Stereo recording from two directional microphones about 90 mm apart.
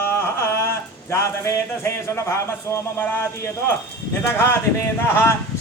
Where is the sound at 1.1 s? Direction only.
30° left (ahead or behind).